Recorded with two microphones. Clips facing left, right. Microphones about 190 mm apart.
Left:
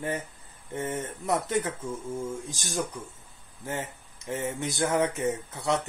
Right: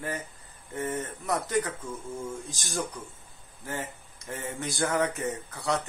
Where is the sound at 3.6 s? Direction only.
20° left (ahead or behind).